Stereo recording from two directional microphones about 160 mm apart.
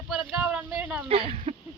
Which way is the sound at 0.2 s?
5° right (ahead or behind).